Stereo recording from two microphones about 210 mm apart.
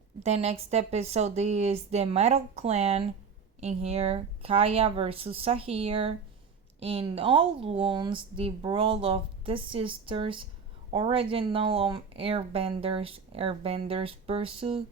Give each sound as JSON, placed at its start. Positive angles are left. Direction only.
{"t": 0.2, "sound": "speech", "side_deg": -30}